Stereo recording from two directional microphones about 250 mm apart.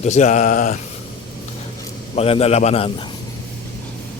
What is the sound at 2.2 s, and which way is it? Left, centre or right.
Speech, left.